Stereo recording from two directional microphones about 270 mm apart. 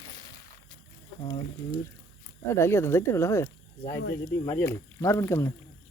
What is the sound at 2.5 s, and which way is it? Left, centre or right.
Speech, centre.